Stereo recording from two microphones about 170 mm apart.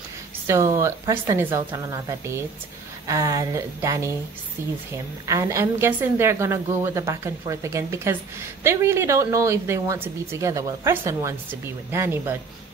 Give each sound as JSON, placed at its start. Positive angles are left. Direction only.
{"t": 0.5, "sound": "a woman's voice", "side_deg": -15}